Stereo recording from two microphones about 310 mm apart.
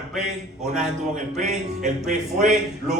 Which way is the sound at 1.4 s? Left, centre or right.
Right.